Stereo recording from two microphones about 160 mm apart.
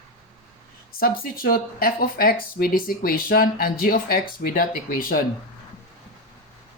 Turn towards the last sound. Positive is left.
turn(degrees=65)  # may be behind; listen again after turning